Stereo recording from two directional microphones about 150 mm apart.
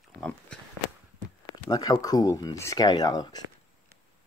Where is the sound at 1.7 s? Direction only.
25° left (ahead or behind).